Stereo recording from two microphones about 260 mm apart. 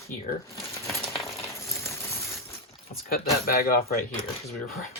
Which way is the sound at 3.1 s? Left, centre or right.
Left.